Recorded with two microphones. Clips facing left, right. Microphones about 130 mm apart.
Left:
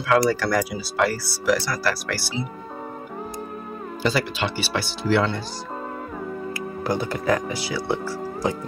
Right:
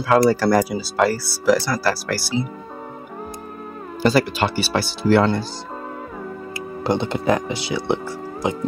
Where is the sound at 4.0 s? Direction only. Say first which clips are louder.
Right 6 dB; 45° right (ahead or behind).